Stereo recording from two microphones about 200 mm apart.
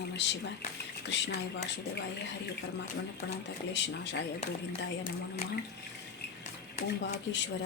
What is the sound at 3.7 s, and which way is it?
Speech, 60° left (ahead or behind).